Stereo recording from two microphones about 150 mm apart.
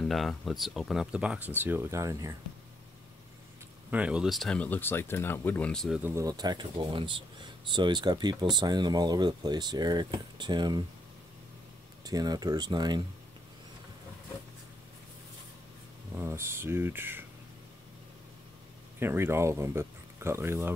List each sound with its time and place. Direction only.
0.0 s speech: centre (ahead or behind); by 2.3 s 20° right (ahead or behind)
3.9 s speech: 10° right (ahead or behind)
5.9 s speech: 15° right (ahead or behind)
12.0 s speech: 25° right (ahead or behind)
16.2 s speech: 15° right (ahead or behind)
18.9 s speech: 15° right (ahead or behind)